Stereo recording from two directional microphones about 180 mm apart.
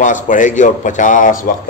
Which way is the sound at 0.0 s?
45° left (ahead or behind).